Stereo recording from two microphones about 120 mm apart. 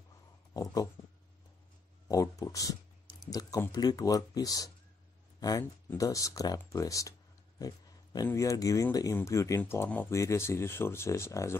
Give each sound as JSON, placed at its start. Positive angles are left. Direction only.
{"t": 0.5, "sound": "speech", "side_deg": 30}
{"t": 2.0, "sound": "speech", "side_deg": 30}
{"t": 6.6, "sound": "a sound", "side_deg": 25}
{"t": 8.3, "sound": "speech", "side_deg": 25}